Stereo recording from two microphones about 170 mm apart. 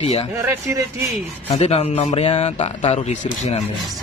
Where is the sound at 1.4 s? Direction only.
35° left (ahead or behind).